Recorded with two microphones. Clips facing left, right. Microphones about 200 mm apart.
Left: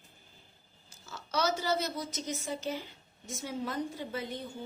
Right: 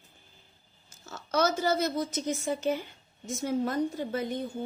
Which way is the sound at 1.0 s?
50° right (ahead or behind).